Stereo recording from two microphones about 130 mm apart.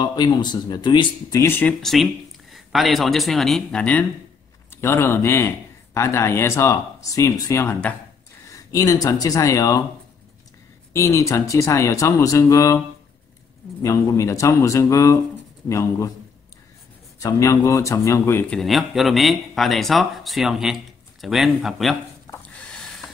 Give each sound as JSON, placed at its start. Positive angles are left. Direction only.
{"t": 0.0, "sound": "speech", "side_deg": 35}
{"t": 1.4, "sound": "speech", "side_deg": 15}
{"t": 4.7, "sound": "speech", "side_deg": 20}
{"t": 10.9, "sound": "speech", "side_deg": 25}
{"t": 13.8, "sound": "speech", "side_deg": 25}
{"t": 17.2, "sound": "speech", "side_deg": 25}
{"t": 18.5, "sound": "speech", "side_deg": 0}
{"t": 22.5, "sound": "a sound", "side_deg": 5}